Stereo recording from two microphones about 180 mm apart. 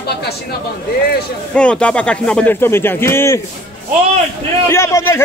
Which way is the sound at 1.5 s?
5° left (ahead or behind).